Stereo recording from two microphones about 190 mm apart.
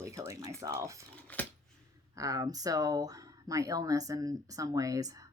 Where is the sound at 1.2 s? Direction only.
10° left (ahead or behind).